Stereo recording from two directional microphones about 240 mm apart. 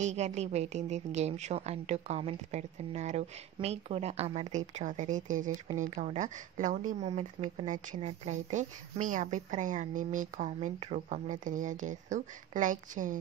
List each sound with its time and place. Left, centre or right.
0.0 s a woman's voice: right